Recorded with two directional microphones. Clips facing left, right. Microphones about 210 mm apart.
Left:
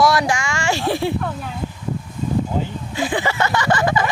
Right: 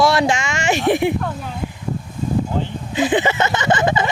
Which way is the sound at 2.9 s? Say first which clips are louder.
Right 4 dB; 20° right (ahead or behind).